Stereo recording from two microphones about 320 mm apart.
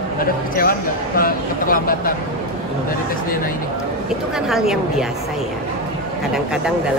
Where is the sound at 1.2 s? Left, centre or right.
Left.